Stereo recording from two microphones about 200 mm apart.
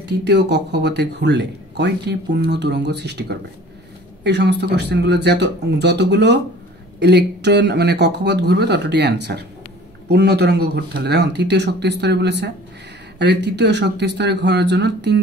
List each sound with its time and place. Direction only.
0.0 s speech: 55° right (ahead or behind)